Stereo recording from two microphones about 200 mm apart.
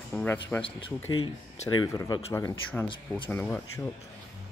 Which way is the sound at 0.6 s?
25° left (ahead or behind).